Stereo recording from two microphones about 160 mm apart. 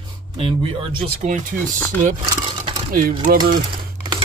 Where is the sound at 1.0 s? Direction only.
50° right (ahead or behind).